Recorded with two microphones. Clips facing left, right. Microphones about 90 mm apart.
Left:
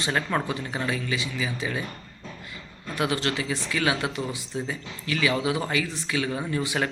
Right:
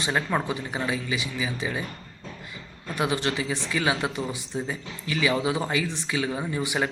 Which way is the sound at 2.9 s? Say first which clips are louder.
Even; 20° right (ahead or behind).